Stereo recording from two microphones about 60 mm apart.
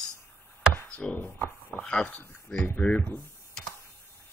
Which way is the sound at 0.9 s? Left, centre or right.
Centre.